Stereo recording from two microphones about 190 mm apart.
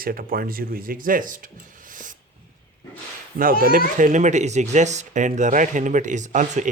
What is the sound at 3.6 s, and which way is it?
Speech, 50° right (ahead or behind).